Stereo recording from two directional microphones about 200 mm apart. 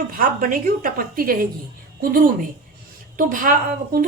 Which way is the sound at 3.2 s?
45° right (ahead or behind).